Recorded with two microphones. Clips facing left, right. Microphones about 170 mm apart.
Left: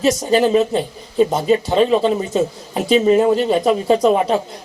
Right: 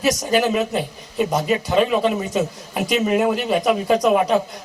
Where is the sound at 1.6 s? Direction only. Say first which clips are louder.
Left 3 dB; 30° left (ahead or behind).